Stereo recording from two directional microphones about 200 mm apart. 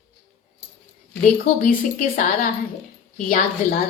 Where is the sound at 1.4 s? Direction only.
40° left (ahead or behind).